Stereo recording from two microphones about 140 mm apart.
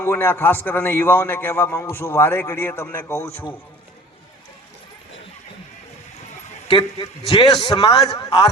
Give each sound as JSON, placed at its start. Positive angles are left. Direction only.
{"t": 0.0, "sound": "a man's voice", "side_deg": 15}
{"t": 6.7, "sound": "a man's voice", "side_deg": 35}